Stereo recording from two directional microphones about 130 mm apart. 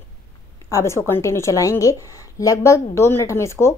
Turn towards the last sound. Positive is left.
turn(degrees=20)  # may be behind; listen again after turning